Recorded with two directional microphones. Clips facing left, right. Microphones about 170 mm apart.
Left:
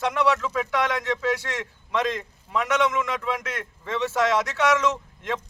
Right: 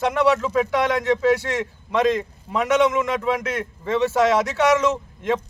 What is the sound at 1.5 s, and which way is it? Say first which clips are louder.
A man's voice: right 5 dB; 35° right (ahead or behind).